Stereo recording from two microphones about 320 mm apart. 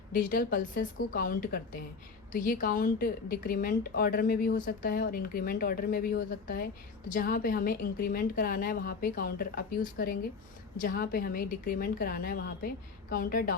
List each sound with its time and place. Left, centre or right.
0.1 s a woman's voice: left